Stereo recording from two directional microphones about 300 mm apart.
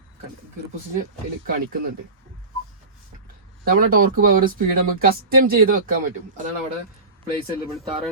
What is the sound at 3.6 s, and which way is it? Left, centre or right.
Speech, right.